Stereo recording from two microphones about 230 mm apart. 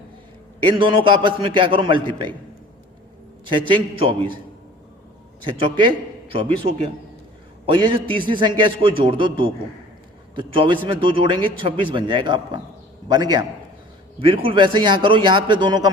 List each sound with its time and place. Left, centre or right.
0.8 s a man's voice: right
3.7 s a man's voice: right
5.5 s a man's voice: right
8.1 s a man's voice: right